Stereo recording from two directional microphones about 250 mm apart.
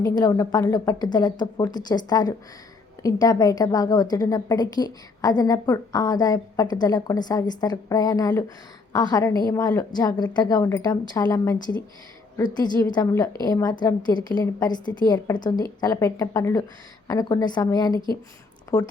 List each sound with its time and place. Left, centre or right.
0.0 s a woman's voice: centre